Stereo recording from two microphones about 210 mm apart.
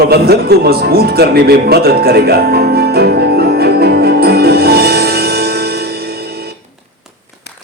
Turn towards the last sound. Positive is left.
turn(degrees=-50)  # may be behind; listen again after turning